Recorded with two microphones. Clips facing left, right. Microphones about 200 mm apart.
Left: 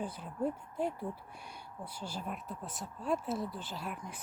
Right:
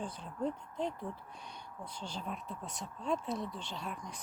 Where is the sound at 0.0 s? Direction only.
5° left (ahead or behind).